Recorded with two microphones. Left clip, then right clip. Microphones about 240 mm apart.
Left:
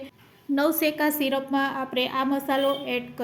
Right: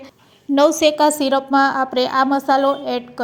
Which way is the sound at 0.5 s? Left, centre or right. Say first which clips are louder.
Right 10 dB; right.